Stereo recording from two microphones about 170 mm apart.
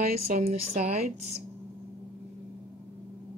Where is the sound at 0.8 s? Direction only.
40° right (ahead or behind).